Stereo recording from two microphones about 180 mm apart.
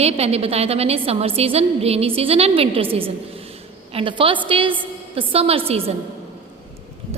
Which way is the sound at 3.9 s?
30° right (ahead or behind).